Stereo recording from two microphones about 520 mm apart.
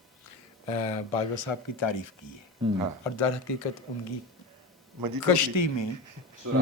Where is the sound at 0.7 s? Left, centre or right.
Left.